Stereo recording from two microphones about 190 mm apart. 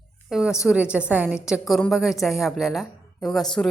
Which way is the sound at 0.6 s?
5° right (ahead or behind).